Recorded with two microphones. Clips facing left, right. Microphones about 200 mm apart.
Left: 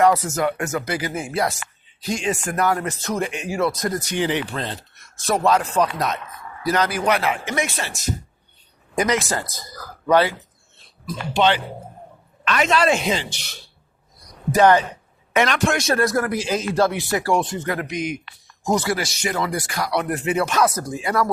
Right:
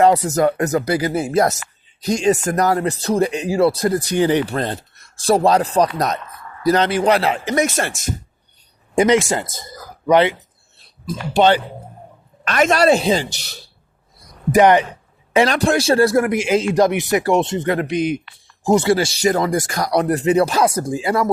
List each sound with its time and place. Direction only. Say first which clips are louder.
0.3 s speech: right 6 dB; 40° right (ahead or behind)
5.0 s speech: right 5 dB; 30° right (ahead or behind); by 8.1 s 50° right (ahead or behind)
9.0 s speech: right 7 dB; 25° right (ahead or behind)
10.8 s speech: right 3 dB; 35° right (ahead or behind)
12.5 s speech: right 5 dB; 45° right (ahead or behind)
14.2 s a sound: right 3 dB; 20° right (ahead or behind)
15.3 s speech: right 4 dB; 30° right (ahead or behind)